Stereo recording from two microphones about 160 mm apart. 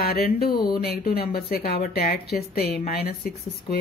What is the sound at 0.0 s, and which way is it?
Speech, 75° left (ahead or behind).